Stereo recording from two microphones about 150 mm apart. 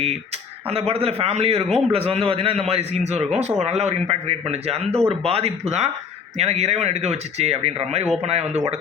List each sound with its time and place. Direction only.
0.7 s a man's voice: 40° right (ahead or behind)